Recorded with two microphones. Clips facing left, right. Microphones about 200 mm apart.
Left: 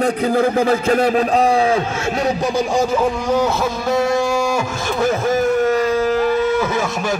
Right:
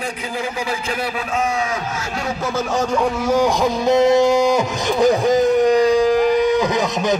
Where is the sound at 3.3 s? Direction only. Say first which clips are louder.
Right 1 dB; 10° right (ahead or behind).